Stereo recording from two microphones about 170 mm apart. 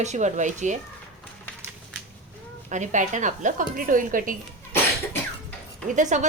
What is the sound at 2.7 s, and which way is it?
A woman's voice, 45° right (ahead or behind).